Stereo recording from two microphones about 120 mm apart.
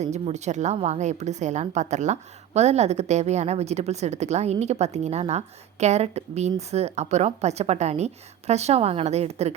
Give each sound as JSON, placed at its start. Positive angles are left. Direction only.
{"t": 0.0, "sound": "a woman's voice", "side_deg": -70}